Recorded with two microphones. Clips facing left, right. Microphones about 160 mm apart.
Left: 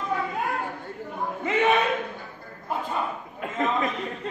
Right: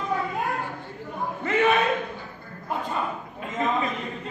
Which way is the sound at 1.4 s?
20° left (ahead or behind).